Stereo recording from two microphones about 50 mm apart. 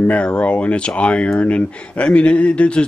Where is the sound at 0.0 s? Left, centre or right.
Left.